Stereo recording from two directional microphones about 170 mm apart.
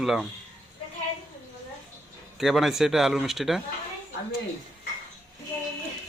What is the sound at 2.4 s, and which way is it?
Speech, centre (ahead or behind).